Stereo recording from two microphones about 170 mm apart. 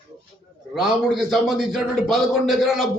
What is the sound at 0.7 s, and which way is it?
Speech, centre (ahead or behind).